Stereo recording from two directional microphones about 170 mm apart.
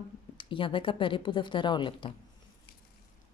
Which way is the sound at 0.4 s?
30° left (ahead or behind).